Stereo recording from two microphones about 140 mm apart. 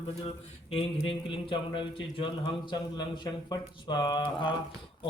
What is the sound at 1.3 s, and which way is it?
Speech, 35° left (ahead or behind).